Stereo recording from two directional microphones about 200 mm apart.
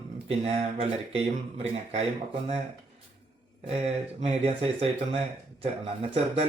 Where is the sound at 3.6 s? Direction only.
30° right (ahead or behind).